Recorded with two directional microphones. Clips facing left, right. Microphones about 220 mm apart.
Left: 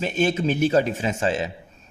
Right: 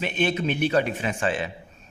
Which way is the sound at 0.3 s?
25° left (ahead or behind).